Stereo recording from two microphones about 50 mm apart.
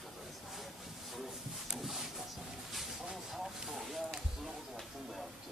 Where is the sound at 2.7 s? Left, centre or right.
Centre.